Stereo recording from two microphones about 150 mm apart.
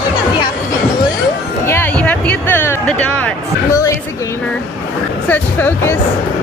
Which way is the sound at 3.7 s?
20° left (ahead or behind).